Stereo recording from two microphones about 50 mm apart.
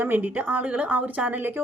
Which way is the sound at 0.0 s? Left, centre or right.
Right.